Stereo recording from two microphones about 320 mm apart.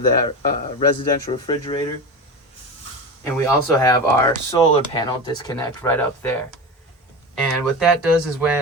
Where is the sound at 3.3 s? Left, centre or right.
Centre.